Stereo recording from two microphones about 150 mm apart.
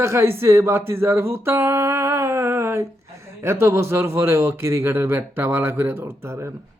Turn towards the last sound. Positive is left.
turn(degrees=-15)  # may be behind; listen again after turning